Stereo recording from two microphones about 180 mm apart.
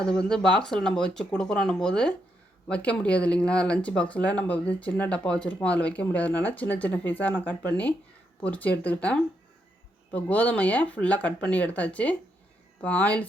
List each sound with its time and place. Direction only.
0.0 s speech: 5° left (ahead or behind)